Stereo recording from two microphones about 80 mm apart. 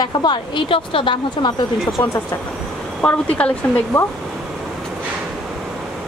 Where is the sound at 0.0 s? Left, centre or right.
Left.